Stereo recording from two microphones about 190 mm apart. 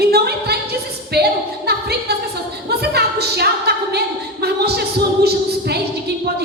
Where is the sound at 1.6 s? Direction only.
55° right (ahead or behind).